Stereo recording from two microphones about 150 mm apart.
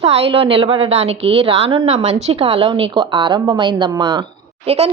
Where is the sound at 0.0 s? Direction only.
40° right (ahead or behind).